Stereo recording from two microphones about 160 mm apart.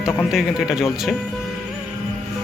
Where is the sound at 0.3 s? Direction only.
Centre (ahead or behind).